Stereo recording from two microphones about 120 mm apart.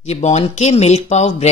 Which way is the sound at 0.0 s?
65° left (ahead or behind).